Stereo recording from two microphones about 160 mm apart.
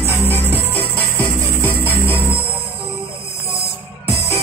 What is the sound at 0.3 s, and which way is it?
Music, 10° left (ahead or behind).